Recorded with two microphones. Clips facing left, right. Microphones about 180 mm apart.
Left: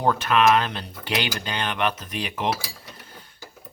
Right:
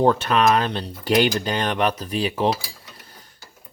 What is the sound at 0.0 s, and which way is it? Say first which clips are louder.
Speech: right 2 dB; 30° right (ahead or behind).